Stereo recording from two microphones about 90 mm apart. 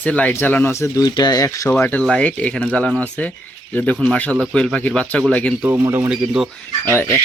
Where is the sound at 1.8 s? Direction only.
20° left (ahead or behind).